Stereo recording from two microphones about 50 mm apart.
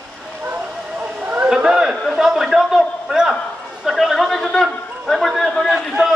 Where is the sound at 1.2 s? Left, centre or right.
Right.